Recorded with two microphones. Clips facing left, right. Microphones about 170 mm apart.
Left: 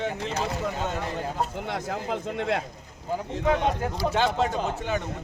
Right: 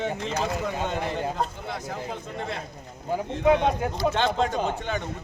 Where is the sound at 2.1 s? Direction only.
70° left (ahead or behind).